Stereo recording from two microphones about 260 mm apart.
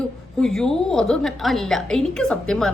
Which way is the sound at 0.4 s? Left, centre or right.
Centre.